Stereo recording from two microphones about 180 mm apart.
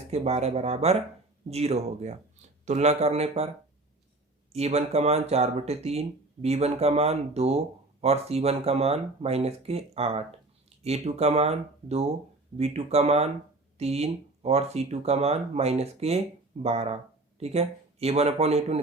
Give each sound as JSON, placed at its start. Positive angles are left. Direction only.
{"t": 0.1, "sound": "speech", "side_deg": -35}
{"t": 4.5, "sound": "speech", "side_deg": -35}